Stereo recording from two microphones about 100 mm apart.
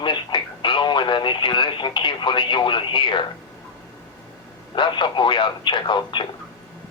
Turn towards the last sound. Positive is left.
turn(degrees=50)  # may be behind; listen again after turning